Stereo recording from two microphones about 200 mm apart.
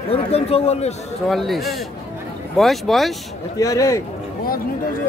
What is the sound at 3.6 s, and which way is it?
Speech, 15° left (ahead or behind).